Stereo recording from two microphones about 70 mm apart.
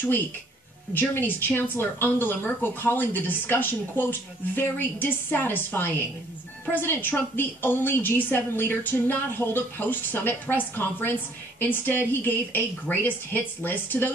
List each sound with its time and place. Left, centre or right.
0.9 s a woman's voice: left